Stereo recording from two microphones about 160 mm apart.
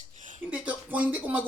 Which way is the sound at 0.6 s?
10° right (ahead or behind).